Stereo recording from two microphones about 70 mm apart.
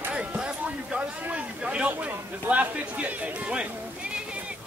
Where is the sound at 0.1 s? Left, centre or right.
Centre.